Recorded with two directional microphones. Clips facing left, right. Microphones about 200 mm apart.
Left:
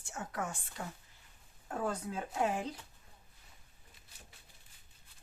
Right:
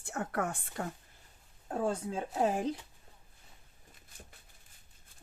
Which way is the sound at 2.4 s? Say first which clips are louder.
Right 4 dB; 40° right (ahead or behind).